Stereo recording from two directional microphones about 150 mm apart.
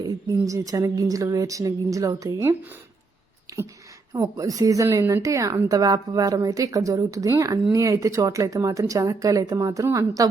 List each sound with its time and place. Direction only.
0.3 s a woman's voice: 20° right (ahead or behind)
4.1 s a woman's voice: 20° right (ahead or behind)